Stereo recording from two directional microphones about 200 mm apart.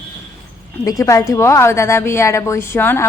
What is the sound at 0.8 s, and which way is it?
A woman's voice, 15° left (ahead or behind).